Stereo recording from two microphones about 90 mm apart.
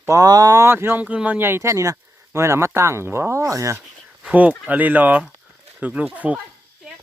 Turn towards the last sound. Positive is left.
turn(degrees=-15)  # may be behind; listen again after turning